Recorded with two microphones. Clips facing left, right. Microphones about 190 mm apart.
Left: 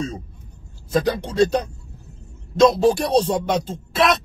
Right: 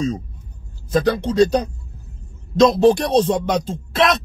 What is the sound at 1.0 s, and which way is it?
Speech, 5° left (ahead or behind).